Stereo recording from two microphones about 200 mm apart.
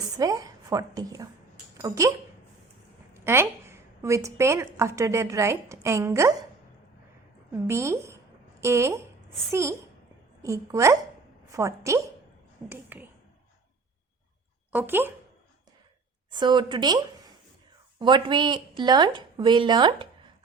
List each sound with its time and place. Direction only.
0.2 s a woman's voice: 20° right (ahead or behind)
3.2 s a woman's voice: 10° right (ahead or behind)
7.7 s a woman's voice: 15° right (ahead or behind)
14.7 s a woman's voice: 10° right (ahead or behind)
16.3 s a woman's voice: 20° right (ahead or behind)